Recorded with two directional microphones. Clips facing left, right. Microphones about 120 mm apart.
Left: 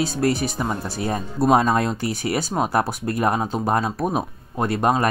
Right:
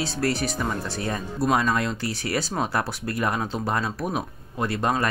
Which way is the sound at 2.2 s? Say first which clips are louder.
Left 3 dB; 15° left (ahead or behind).